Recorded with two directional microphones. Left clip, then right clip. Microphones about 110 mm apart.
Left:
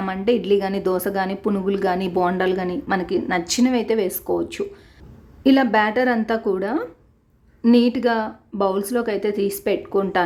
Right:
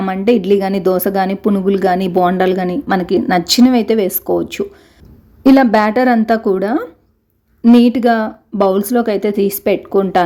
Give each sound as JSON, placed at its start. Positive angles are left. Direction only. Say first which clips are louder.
{"t": 0.0, "sound": "a woman's voice", "louder": "right 7 dB", "side_deg": -45}